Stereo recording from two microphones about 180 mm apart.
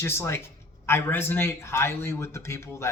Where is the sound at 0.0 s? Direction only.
15° left (ahead or behind).